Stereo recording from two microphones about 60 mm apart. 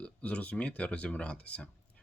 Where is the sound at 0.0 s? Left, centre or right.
Left.